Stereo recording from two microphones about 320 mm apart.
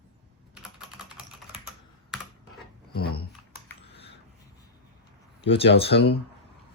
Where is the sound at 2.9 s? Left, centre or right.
Left.